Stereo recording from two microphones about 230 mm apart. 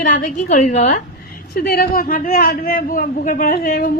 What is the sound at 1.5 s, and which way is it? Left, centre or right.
A man's voice, left.